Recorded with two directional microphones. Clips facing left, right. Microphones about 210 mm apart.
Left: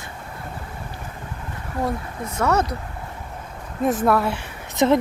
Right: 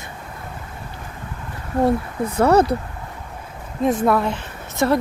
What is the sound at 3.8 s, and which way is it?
A woman's voice, centre (ahead or behind).